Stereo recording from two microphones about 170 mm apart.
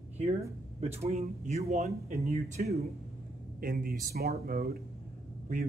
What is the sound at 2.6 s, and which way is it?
Speech, 50° right (ahead or behind).